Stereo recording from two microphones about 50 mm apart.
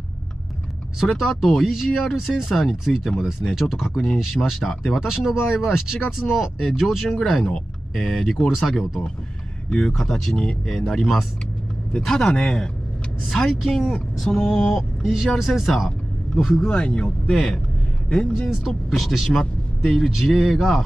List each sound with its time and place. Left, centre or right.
1.4 s speech: centre
8.7 s speech: centre
14.8 s speech: centre
16.6 s speech: centre